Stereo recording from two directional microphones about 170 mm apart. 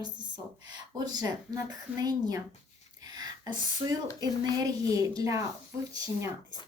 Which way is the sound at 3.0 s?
25° right (ahead or behind).